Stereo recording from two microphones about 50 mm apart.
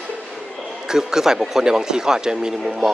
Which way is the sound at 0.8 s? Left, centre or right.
Centre.